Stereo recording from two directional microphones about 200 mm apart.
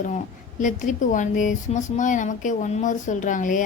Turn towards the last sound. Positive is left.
turn(degrees=40)  # may be behind; listen again after turning